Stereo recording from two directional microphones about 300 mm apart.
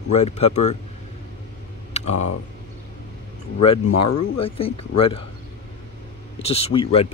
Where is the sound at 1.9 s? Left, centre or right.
Left.